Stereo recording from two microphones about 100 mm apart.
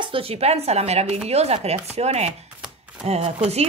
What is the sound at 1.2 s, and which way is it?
Chopping, 90° right.